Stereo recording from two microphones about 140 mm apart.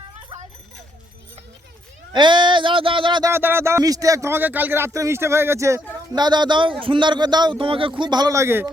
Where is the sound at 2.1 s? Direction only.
35° right (ahead or behind).